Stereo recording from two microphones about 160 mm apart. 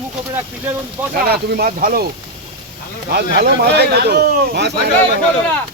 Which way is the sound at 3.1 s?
80° right.